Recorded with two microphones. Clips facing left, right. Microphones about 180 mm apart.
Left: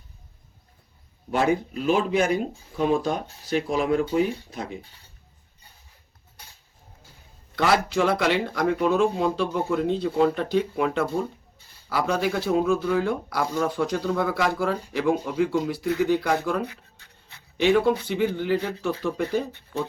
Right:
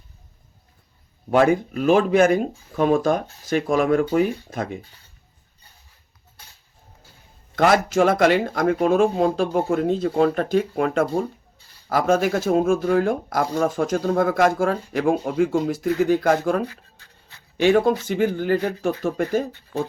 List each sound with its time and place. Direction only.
1.5 s speech: 50° right (ahead or behind)
7.5 s speech: 45° right (ahead or behind)